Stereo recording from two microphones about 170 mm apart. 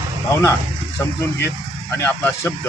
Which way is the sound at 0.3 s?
15° left (ahead or behind).